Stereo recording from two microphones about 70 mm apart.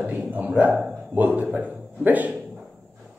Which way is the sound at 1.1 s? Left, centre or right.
Right.